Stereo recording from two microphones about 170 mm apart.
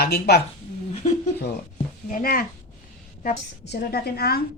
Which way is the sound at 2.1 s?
60° left (ahead or behind).